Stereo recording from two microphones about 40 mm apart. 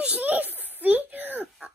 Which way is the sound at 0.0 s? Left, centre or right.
Right.